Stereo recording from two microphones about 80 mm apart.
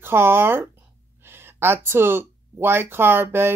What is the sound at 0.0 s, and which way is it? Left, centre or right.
Speech, right.